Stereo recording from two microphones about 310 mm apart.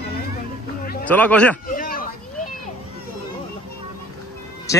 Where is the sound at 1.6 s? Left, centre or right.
Left.